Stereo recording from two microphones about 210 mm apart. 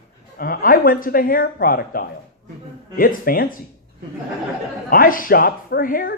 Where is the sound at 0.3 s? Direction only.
45° left (ahead or behind).